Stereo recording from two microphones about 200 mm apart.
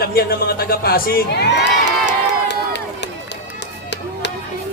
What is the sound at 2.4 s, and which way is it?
Run, 60° left (ahead or behind).